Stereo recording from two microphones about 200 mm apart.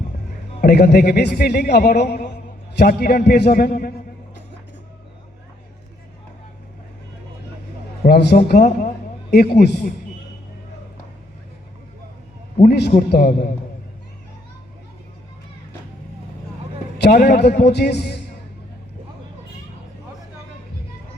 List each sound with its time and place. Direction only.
0.6 s a man's voice: 55° left (ahead or behind)
8.0 s a man's voice: 55° left (ahead or behind)
12.6 s a man's voice: 50° left (ahead or behind)
17.0 s a man's voice: 50° left (ahead or behind)